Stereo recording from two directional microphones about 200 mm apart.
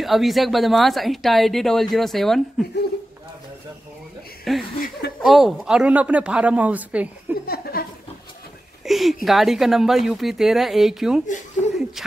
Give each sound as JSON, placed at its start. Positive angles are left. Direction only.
{"t": 0.0, "sound": "speech", "side_deg": 0}
{"t": 4.7, "sound": "speech", "side_deg": 45}
{"t": 5.2, "sound": "speech", "side_deg": 0}
{"t": 7.4, "sound": "speech", "side_deg": 50}
{"t": 8.8, "sound": "a sound", "side_deg": 0}
{"t": 9.2, "sound": "speech", "side_deg": 0}
{"t": 11.2, "sound": "chuckle", "side_deg": 40}